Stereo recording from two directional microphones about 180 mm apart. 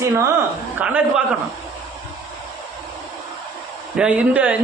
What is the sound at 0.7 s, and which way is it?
Speech, 10° right (ahead or behind).